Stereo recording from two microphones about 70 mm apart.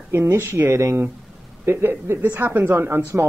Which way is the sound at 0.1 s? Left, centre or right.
Right.